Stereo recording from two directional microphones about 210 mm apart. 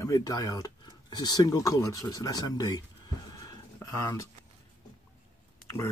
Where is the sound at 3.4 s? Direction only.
15° left (ahead or behind).